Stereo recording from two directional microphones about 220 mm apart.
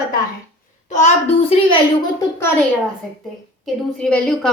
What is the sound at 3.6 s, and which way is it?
Speech, 5° left (ahead or behind).